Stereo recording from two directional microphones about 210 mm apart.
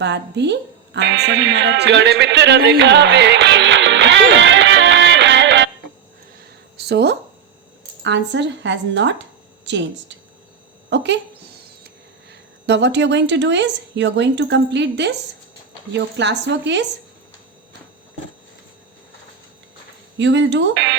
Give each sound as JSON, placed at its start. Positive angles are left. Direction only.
{"t": 0.0, "sound": "a woman's voice", "side_deg": -55}
{"t": 0.9, "sound": "music", "side_deg": -55}
{"t": 6.7, "sound": "a sound", "side_deg": -50}
{"t": 8.0, "sound": "a woman's voice", "side_deg": -60}
{"t": 12.3, "sound": "a woman's voice", "side_deg": -55}
{"t": 20.1, "sound": "a woman's voice", "side_deg": -60}